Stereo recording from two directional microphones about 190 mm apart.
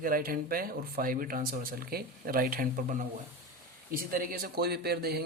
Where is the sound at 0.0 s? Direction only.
50° right (ahead or behind).